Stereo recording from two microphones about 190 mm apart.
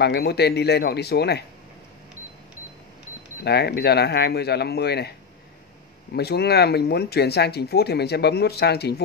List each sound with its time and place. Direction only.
0.0 s speech: 60° left (ahead or behind)
3.4 s speech: 60° left (ahead or behind)
6.1 s speech: 60° left (ahead or behind)